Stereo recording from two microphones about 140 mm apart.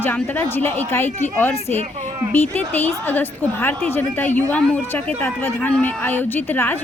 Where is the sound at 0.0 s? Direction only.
15° left (ahead or behind).